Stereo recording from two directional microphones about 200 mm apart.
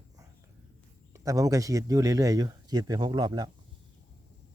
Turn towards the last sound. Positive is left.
turn(degrees=-20)  # may be behind; listen again after turning